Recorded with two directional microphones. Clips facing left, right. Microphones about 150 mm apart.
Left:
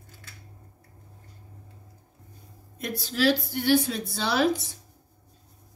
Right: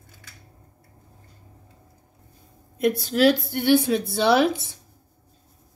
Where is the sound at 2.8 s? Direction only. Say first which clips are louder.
Right 6 dB; 50° right (ahead or behind).